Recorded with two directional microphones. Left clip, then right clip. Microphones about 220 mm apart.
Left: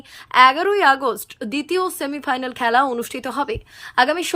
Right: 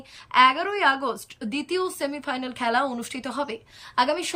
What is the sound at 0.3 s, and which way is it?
Speech, 20° left (ahead or behind).